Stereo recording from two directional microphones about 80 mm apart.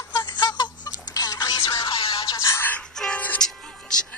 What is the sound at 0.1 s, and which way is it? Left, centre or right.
Music, left.